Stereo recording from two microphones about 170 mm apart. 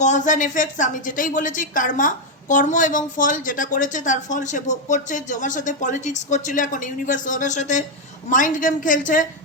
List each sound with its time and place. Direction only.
0.0 s a woman's voice: 45° left (ahead or behind)